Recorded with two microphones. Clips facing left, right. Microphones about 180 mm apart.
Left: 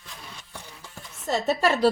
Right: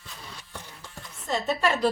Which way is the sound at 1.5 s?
40° left (ahead or behind).